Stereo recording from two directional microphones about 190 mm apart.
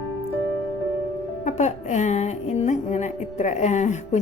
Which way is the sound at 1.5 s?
40° left (ahead or behind).